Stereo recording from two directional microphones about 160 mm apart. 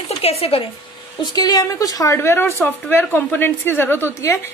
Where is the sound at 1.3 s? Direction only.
25° left (ahead or behind).